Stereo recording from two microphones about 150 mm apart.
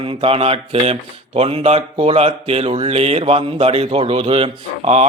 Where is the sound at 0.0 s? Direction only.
40° right (ahead or behind).